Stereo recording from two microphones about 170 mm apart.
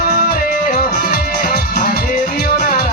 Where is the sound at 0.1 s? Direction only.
60° left (ahead or behind).